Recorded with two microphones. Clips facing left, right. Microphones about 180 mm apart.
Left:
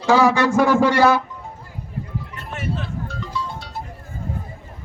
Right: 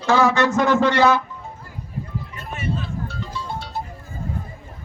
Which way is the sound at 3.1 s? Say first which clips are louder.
Left 1 dB; 30° right (ahead or behind).